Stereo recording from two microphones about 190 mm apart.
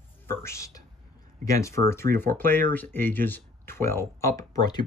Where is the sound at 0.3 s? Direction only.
15° left (ahead or behind).